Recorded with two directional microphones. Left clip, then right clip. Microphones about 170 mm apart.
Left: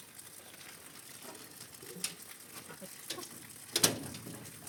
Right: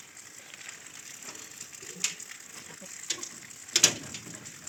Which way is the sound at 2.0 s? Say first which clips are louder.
Right 10 dB; 50° left (ahead or behind).